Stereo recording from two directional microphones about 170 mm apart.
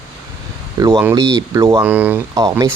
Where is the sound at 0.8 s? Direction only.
15° right (ahead or behind).